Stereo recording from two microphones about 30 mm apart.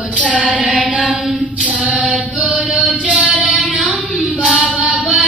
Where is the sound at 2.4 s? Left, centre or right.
Right.